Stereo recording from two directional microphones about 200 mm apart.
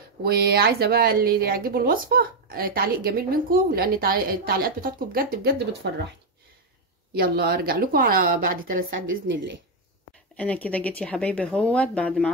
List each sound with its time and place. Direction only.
0.2 s a woman's voice: 50° right (ahead or behind)
7.2 s a woman's voice: 50° right (ahead or behind)
9.3 s speech: 65° right (ahead or behind)
10.3 s speech: 5° left (ahead or behind)